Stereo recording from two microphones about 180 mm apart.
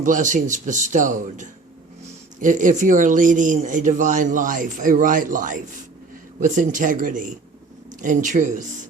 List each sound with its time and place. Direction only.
0.0 s speech: 45° right (ahead or behind)